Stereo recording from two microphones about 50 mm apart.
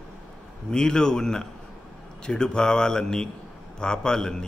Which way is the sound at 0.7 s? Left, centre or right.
Centre.